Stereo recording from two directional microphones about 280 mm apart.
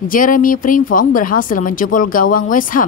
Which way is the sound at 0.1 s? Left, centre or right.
Left.